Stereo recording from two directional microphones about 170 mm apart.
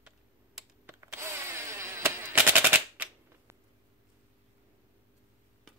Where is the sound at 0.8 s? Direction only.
15° right (ahead or behind).